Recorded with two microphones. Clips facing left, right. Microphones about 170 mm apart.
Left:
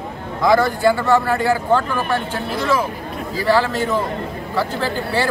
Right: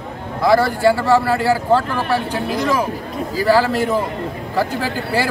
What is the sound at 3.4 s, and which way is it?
Speech, 10° right (ahead or behind).